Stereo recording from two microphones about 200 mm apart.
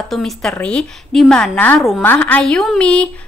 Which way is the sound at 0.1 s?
5° left (ahead or behind).